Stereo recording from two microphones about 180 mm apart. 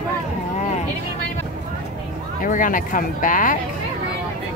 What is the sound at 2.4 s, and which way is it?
Speech, 45° left (ahead or behind).